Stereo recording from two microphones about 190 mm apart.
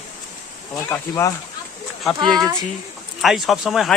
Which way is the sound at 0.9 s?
15° left (ahead or behind).